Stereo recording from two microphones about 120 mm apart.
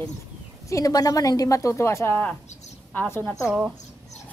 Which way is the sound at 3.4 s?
10° right (ahead or behind).